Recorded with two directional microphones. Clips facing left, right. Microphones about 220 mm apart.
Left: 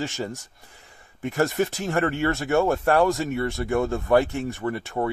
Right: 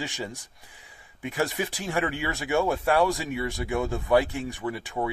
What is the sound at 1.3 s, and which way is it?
Speech, 50° left (ahead or behind).